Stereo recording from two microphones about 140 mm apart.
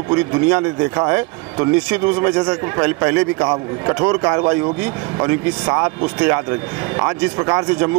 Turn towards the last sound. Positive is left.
turn(degrees=-20)  # may be behind; listen again after turning